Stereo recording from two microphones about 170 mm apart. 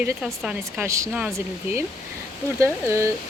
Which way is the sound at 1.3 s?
15° right (ahead or behind).